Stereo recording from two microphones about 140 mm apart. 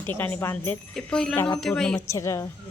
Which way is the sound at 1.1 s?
5° left (ahead or behind).